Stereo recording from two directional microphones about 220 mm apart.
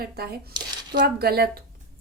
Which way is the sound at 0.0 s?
45° right (ahead or behind).